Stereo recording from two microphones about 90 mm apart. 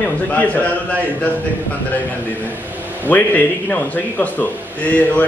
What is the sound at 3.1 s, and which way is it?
A man's voice, 20° left (ahead or behind).